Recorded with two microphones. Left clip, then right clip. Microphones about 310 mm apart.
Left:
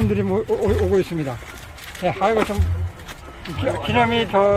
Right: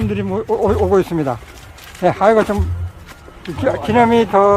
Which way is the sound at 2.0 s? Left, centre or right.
Right.